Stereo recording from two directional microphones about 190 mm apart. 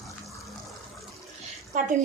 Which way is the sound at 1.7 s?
45° right (ahead or behind).